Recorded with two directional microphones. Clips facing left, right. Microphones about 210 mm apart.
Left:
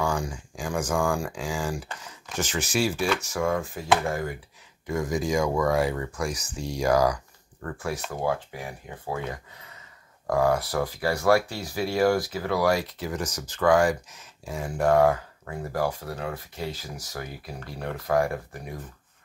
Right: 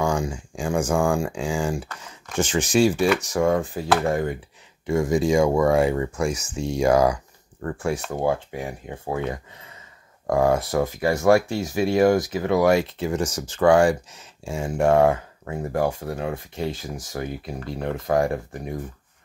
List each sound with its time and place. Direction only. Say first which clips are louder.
0.0 s speech: right 4 dB; 25° right (ahead or behind)
16.7 s speech: right 6 dB; 50° right (ahead or behind)
17.6 s speech: right 4 dB; 25° right (ahead or behind)